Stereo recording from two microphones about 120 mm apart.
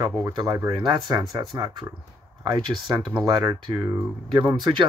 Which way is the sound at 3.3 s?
35° right (ahead or behind).